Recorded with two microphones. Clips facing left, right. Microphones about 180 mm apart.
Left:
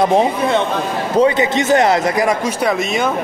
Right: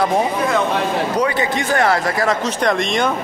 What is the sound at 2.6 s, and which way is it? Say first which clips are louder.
Speech: even; 5° left (ahead or behind).